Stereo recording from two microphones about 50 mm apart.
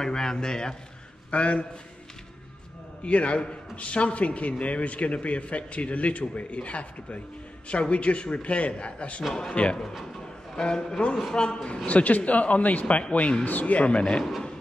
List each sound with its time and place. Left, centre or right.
0.0 s a man's voice: centre
1.3 s a man's voice: left
3.0 s a man's voice: left
9.3 s a man's voice: centre